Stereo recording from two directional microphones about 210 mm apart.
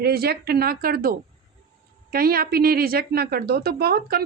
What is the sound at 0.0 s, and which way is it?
A woman's voice, 50° right (ahead or behind).